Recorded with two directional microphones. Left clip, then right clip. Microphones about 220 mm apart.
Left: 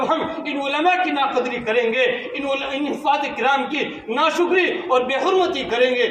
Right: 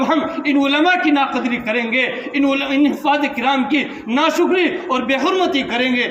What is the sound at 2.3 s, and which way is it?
A man's voice, 35° right (ahead or behind).